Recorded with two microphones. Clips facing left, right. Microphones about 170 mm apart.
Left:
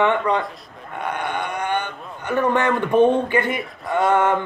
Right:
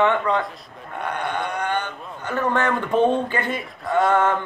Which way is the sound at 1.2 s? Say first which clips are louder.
Right 1 dB; 60° left (ahead or behind).